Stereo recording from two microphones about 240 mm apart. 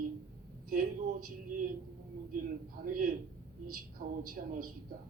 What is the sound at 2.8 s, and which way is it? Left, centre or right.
A man's voice, right.